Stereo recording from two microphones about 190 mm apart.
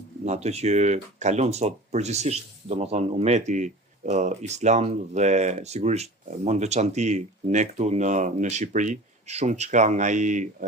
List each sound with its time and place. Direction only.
0.3 s speech: 35° right (ahead or behind)